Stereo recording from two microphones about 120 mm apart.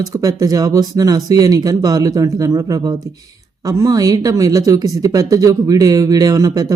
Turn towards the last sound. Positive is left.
turn(degrees=-30)  # may be behind; listen again after turning